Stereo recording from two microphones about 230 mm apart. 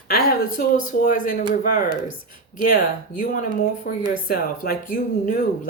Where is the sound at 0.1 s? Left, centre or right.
Left.